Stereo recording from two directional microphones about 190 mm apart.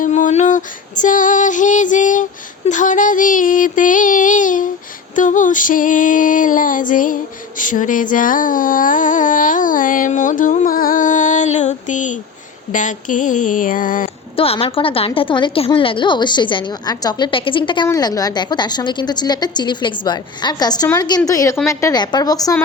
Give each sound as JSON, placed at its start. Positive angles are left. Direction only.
{"t": 0.0, "sound": "female singing", "side_deg": 40}
{"t": 2.6, "sound": "a sound", "side_deg": 40}
{"t": 14.3, "sound": "a woman's voice", "side_deg": 30}